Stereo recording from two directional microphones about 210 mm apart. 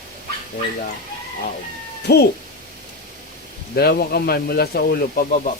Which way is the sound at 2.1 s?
50° left (ahead or behind).